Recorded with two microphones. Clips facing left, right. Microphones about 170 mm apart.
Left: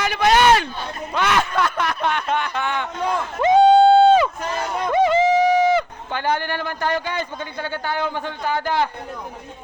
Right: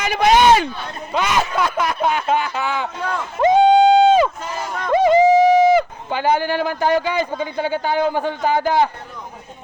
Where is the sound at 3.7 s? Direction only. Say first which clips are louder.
Left 2 dB; 15° right (ahead or behind).